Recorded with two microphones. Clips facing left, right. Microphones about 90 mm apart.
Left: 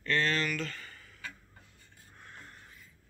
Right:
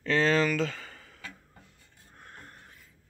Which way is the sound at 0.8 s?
90° right.